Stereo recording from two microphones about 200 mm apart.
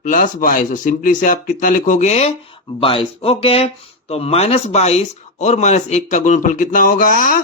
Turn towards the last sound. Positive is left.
turn(degrees=45)  # may be behind; listen again after turning